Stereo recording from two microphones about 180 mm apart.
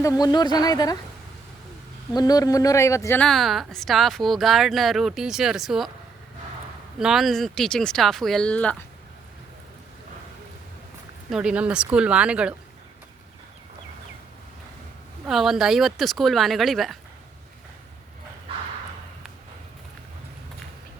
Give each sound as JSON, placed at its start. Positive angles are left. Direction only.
{"t": 0.0, "sound": "speech", "side_deg": 20}
{"t": 2.1, "sound": "a woman's voice", "side_deg": 20}
{"t": 7.0, "sound": "a woman's voice", "side_deg": 0}
{"t": 11.3, "sound": "a woman's voice", "side_deg": -5}
{"t": 15.3, "sound": "a woman's voice", "side_deg": 0}